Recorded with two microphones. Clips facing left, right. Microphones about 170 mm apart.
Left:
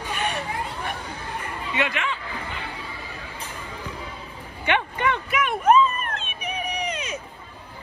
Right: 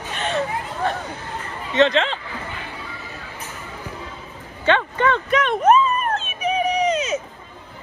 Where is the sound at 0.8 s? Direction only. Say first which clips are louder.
Right 6 dB; 10° left (ahead or behind).